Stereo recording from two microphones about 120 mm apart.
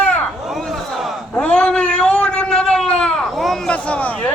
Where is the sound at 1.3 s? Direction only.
10° left (ahead or behind).